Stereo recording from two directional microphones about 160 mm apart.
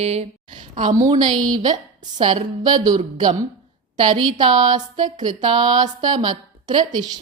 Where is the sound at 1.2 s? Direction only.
25° right (ahead or behind).